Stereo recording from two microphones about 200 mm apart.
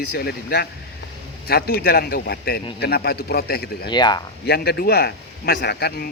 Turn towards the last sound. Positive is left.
turn(degrees=50)  # may be behind; listen again after turning